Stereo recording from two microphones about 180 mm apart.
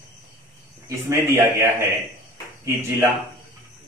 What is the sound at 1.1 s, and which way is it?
Speech, 15° right (ahead or behind).